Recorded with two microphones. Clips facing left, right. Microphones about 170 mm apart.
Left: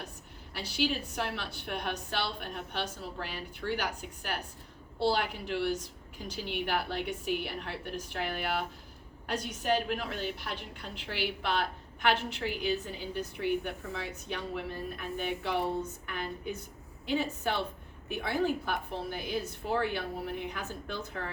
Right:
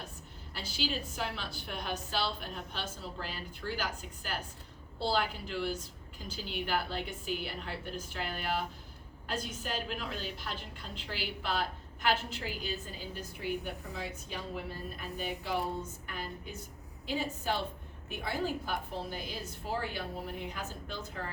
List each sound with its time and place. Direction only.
0.5 s a woman's voice: 70° left (ahead or behind)